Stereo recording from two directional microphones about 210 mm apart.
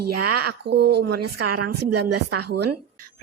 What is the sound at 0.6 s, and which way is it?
Speech, 55° right (ahead or behind).